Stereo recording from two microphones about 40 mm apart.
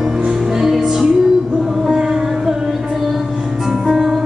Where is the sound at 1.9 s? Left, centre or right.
Centre.